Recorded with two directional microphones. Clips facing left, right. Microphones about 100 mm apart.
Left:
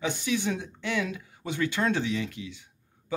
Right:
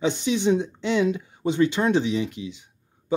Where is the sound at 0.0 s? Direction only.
20° right (ahead or behind).